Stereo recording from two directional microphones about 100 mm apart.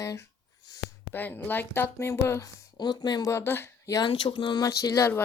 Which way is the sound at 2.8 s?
45° left (ahead or behind).